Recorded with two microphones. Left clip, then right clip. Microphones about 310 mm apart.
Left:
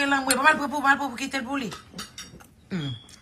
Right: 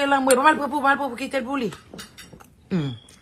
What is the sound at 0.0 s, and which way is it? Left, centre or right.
Speech, centre.